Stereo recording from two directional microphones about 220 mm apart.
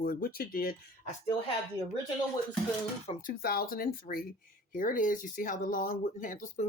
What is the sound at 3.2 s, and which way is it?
Speech, 45° left (ahead or behind).